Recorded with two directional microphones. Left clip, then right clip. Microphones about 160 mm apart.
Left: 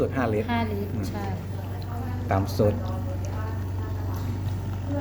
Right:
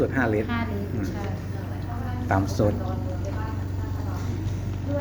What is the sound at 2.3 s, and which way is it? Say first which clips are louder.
Speech: right 2 dB; 15° left (ahead or behind).